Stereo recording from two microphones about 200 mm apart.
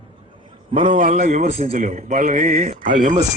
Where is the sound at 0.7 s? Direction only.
40° right (ahead or behind).